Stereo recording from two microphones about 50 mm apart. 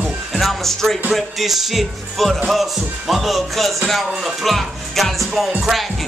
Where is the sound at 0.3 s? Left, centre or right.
Centre.